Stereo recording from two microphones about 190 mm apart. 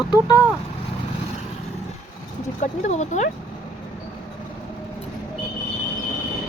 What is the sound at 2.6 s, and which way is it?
Speech, 40° left (ahead or behind).